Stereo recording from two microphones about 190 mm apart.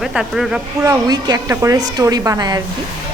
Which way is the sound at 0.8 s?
20° right (ahead or behind).